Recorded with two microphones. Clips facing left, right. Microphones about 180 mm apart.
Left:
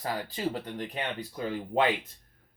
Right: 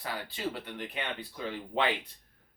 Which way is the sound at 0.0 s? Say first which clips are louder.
Left 4 dB; 40° left (ahead or behind).